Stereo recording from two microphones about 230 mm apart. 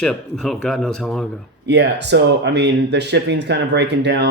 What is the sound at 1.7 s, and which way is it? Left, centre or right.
Speech, right.